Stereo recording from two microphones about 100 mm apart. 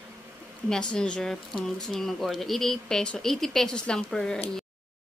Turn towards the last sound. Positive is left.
turn(degrees=5)  # may be behind; listen again after turning